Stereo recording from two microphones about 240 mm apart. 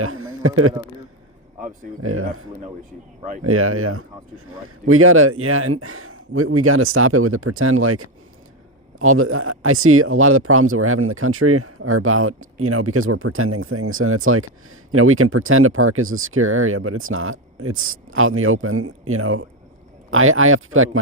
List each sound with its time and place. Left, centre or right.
0.0 s a man's voice: right
2.0 s speech: right
3.4 s speech: right